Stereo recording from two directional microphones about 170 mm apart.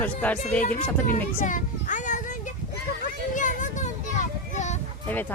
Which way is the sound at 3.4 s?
50° left (ahead or behind).